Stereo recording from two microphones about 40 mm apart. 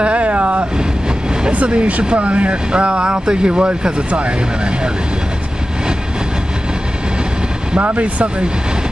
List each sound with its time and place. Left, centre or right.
0.0 s vehicle: right
1.5 s speech: right
7.8 s speech: right